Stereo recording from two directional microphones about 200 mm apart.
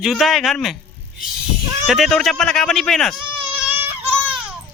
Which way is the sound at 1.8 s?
Centre (ahead or behind).